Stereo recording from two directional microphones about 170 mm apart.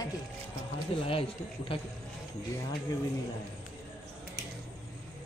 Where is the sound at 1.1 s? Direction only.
30° left (ahead or behind).